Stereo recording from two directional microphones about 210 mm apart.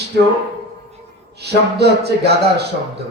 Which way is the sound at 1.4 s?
50° right (ahead or behind).